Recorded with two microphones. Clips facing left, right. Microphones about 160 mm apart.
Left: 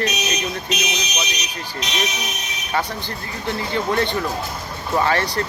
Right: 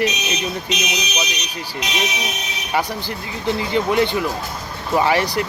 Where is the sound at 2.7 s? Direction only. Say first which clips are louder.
Right 2 dB; 10° right (ahead or behind).